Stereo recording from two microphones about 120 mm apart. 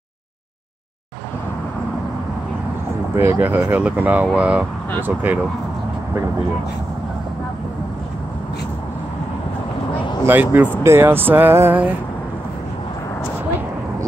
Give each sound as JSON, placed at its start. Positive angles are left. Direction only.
{"t": 3.2, "sound": "speech", "side_deg": -15}
{"t": 10.2, "sound": "speech", "side_deg": -15}